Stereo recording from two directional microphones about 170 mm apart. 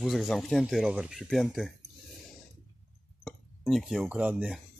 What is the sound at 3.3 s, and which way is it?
Speech, centre (ahead or behind).